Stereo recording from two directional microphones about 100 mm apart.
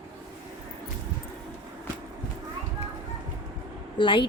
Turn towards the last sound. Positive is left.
turn(degrees=55)  # may be behind; listen again after turning